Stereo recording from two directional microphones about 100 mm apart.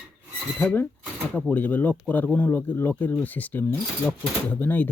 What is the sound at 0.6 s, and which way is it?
Speech, 15° left (ahead or behind).